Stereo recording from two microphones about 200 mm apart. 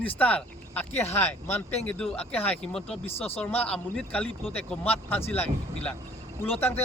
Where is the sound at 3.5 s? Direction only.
5° left (ahead or behind).